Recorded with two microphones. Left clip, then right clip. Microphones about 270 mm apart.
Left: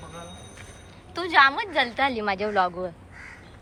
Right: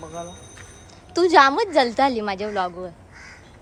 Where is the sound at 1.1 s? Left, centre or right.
Right.